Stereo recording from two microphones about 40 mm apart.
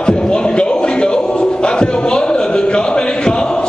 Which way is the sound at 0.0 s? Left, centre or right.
Left.